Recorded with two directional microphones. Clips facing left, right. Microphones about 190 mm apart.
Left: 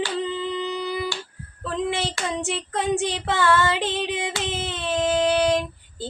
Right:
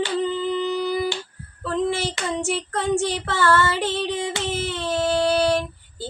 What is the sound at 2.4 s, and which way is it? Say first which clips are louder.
Child singing: right 2 dB; 15° left (ahead or behind).